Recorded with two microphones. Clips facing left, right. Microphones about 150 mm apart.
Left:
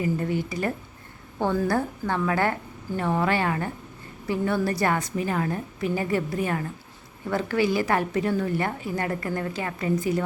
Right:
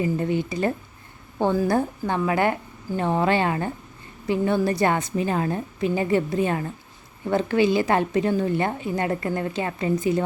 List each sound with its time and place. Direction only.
0.0 s a woman's voice: 25° right (ahead or behind)